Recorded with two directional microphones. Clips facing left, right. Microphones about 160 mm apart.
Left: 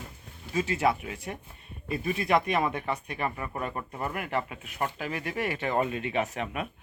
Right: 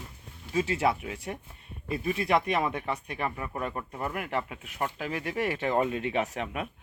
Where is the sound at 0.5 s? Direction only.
25° right (ahead or behind).